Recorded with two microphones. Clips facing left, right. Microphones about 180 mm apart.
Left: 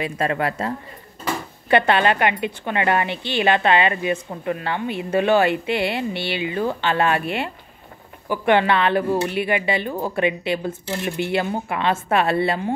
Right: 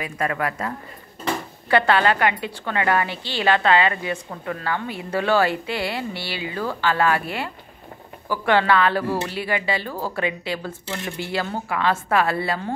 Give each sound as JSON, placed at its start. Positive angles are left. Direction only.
{"t": 0.0, "sound": "a woman's voice", "side_deg": 25}